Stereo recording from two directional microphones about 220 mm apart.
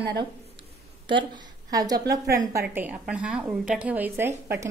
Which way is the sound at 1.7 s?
15° right (ahead or behind).